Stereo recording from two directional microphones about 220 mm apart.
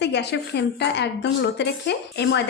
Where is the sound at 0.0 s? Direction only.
50° left (ahead or behind).